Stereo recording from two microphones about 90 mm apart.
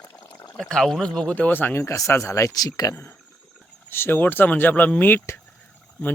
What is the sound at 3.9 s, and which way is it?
Speech, 25° left (ahead or behind).